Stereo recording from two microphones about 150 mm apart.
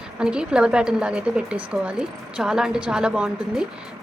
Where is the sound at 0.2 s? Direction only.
5° right (ahead or behind).